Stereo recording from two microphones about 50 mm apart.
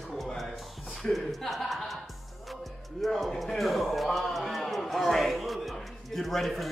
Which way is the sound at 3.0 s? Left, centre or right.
Centre.